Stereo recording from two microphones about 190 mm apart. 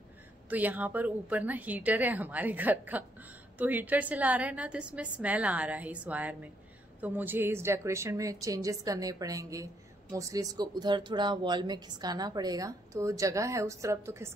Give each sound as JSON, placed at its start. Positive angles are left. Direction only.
{"t": 0.5, "sound": "a woman's voice", "side_deg": -10}